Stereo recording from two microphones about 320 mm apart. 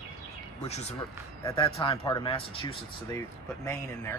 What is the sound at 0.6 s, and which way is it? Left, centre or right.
Speech, left.